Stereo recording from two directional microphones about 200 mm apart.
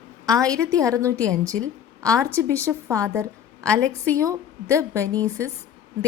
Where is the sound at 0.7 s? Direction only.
15° right (ahead or behind).